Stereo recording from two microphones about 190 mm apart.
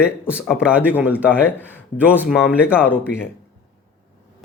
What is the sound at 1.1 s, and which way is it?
A man's voice, 10° left (ahead or behind).